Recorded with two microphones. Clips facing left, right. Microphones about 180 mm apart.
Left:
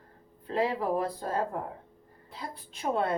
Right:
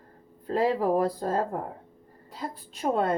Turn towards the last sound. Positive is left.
turn(degrees=-40)  # may be behind; listen again after turning